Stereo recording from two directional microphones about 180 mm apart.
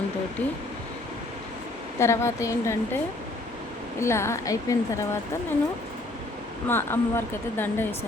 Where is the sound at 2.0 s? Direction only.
15° left (ahead or behind).